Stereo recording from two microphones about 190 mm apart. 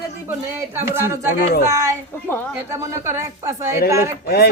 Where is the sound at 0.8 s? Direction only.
10° right (ahead or behind).